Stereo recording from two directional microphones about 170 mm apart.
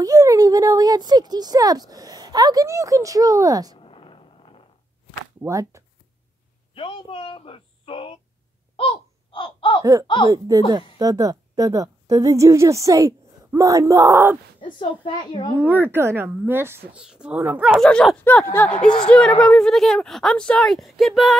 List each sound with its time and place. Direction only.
0.0 s speech: 20° right (ahead or behind)
3.7 s a sound: 35° left (ahead or behind)
5.4 s speech: 20° right (ahead or behind)
6.7 s speech: 30° left (ahead or behind)
8.7 s a sound: 30° left (ahead or behind)
10.2 s a woman's voice: 20° right (ahead or behind)
14.6 s speech: 30° left (ahead or behind)
15.5 s a woman's voice: 10° right (ahead or behind)
17.8 s speech: 5° left (ahead or behind)